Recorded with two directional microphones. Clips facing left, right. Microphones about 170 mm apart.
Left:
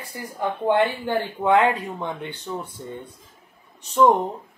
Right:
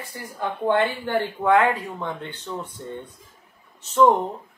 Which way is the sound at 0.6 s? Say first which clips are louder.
Left 1 dB; 15° left (ahead or behind).